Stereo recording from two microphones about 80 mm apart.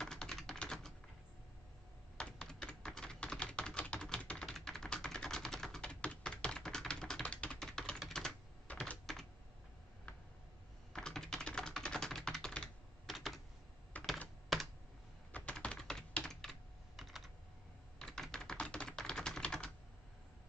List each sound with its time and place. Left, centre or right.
0.0 s typing: centre
2.1 s typing: centre
9.1 s computer keyboard: centre
10.9 s typing: centre
13.9 s computer keyboard: centre
14.5 s computer keyboard: centre
15.3 s computer keyboard: centre
17.9 s typing: centre